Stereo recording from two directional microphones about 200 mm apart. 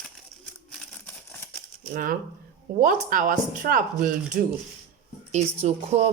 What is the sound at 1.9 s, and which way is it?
Speech, 45° right (ahead or behind).